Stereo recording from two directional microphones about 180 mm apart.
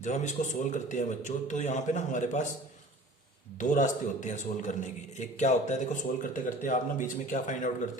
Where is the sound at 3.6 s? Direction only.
45° left (ahead or behind).